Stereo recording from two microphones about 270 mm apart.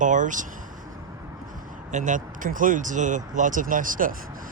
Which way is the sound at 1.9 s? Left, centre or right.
Right.